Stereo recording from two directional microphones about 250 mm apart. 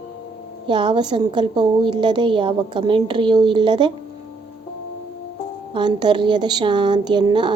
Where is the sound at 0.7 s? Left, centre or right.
Centre.